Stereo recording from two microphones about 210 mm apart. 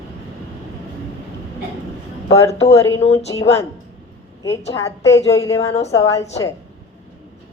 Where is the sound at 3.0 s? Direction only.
30° left (ahead or behind).